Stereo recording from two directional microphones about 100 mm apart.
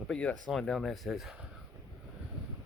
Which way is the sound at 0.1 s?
10° left (ahead or behind).